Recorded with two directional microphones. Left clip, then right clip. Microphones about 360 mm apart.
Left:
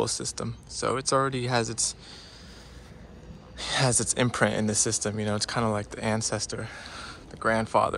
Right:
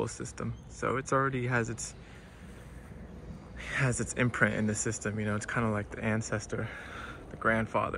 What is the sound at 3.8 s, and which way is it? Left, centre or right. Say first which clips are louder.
Speech: left 6 dB; centre.